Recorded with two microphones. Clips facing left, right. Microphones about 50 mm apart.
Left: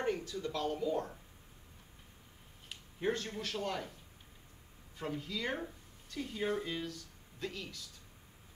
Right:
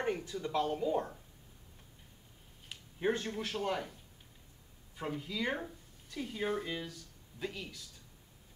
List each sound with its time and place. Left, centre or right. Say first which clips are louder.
0.0 s speech: even; centre
3.0 s a man's voice: right 2 dB; centre
4.9 s speech: right 1 dB; centre